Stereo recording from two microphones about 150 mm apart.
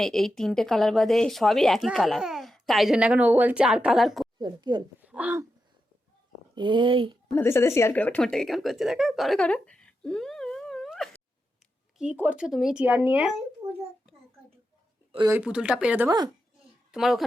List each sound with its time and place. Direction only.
0.0 s speech: 5° left (ahead or behind)
4.4 s speech: 30° right (ahead or behind)
4.9 s speech: 10° right (ahead or behind)
6.6 s speech: 35° right (ahead or behind)
7.3 s speech: 15° left (ahead or behind)
11.9 s speech: 10° right (ahead or behind)
15.3 s speech: 10° right (ahead or behind)
16.0 s speech: 25° right (ahead or behind)
16.9 s speech: centre (ahead or behind)